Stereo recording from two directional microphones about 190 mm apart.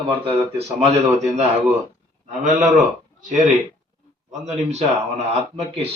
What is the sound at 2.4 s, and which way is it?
Speech, 45° right (ahead or behind).